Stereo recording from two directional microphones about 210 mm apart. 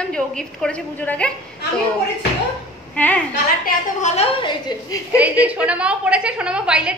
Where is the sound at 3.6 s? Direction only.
35° left (ahead or behind).